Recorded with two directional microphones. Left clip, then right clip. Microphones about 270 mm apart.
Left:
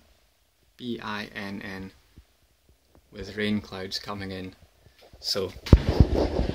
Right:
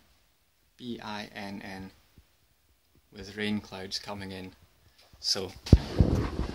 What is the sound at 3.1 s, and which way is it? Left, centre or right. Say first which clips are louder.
Speech: left 4 dB; centre.